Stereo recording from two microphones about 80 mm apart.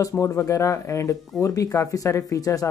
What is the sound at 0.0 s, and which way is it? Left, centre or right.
Speech, left.